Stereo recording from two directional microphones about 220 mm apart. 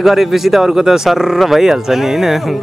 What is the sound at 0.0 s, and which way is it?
Speech, centre (ahead or behind).